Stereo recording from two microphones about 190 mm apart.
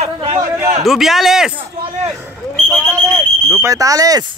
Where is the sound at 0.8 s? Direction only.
Centre (ahead or behind).